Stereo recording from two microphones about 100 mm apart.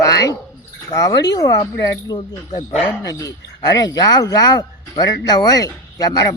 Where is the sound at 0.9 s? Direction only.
35° left (ahead or behind).